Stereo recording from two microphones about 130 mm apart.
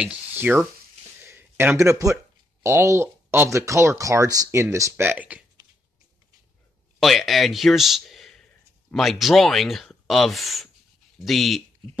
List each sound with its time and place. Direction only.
0.0 s speech: 10° right (ahead or behind)
1.2 s a sound: 15° right (ahead or behind)
2.6 s speech: 20° right (ahead or behind)
7.0 s speech: centre (ahead or behind)